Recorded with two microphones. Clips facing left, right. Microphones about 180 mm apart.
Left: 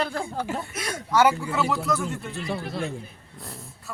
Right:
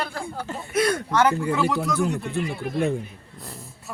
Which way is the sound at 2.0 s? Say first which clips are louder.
Right 6 dB; 60° right (ahead or behind).